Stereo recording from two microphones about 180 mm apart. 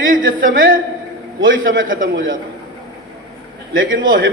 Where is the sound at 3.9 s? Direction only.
50° right (ahead or behind).